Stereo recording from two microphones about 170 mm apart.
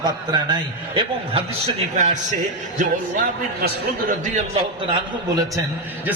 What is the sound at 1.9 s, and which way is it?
A man's voice, 45° right (ahead or behind).